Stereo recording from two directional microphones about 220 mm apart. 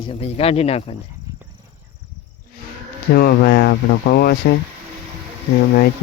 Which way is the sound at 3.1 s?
45° left (ahead or behind).